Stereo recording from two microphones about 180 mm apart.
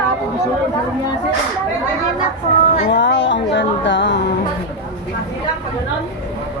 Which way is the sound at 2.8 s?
70° left (ahead or behind).